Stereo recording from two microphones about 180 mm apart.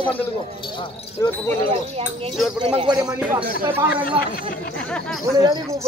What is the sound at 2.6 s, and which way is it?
Speech, 25° right (ahead or behind).